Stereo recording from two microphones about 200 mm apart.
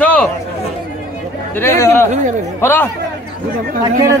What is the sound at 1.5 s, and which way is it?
A man's voice, 10° left (ahead or behind).